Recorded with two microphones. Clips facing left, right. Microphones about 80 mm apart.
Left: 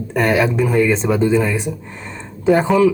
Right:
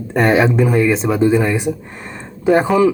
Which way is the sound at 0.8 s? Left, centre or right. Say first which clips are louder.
Right 1 dB; centre.